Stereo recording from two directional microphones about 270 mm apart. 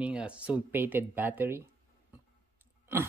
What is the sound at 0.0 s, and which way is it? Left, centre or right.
Speech, centre.